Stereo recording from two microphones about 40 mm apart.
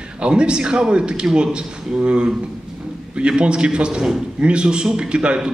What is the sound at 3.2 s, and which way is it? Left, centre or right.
A man's voice, right.